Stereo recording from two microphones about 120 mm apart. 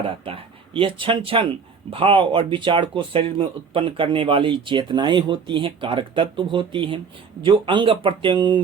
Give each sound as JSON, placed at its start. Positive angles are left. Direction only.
{"t": 0.0, "sound": "speech", "side_deg": -50}